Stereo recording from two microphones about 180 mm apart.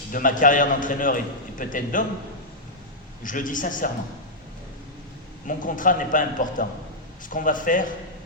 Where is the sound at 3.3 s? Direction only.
45° left (ahead or behind).